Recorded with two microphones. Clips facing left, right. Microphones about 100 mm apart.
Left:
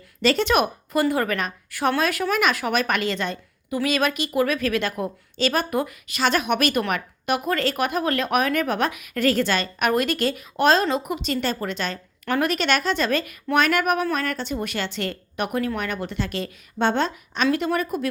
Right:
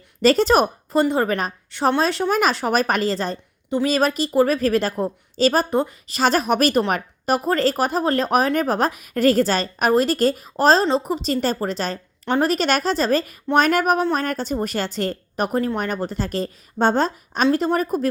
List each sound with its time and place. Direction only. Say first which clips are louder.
0.2 s a woman's voice: right 4 dB; 40° right (ahead or behind)